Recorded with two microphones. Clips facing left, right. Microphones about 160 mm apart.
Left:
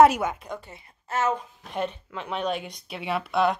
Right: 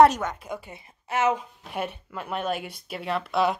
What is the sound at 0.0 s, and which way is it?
Speech, 5° left (ahead or behind).